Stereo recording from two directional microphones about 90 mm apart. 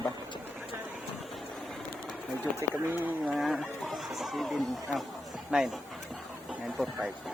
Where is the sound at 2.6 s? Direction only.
20° right (ahead or behind).